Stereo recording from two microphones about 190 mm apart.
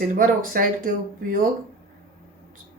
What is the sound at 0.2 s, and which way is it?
Speech, 45° right (ahead or behind).